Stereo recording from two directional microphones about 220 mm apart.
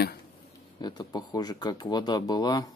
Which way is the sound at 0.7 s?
20° left (ahead or behind).